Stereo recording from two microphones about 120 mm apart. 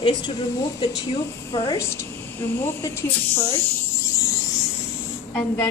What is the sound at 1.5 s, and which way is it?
Speech, 25° left (ahead or behind).